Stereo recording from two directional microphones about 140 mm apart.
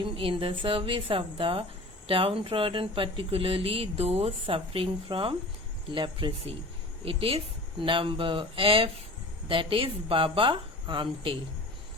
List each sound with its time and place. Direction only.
0.0 s speech: 40° right (ahead or behind)